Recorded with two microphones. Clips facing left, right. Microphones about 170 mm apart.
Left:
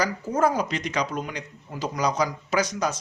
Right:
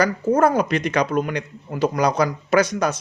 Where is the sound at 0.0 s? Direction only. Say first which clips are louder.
Right 6 dB; 60° right (ahead or behind).